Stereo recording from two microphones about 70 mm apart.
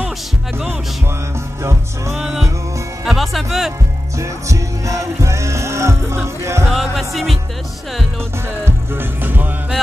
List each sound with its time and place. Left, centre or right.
1.6 s music: right
2.1 s music: centre
4.2 s music: right
6.7 s music: centre
8.6 s music: right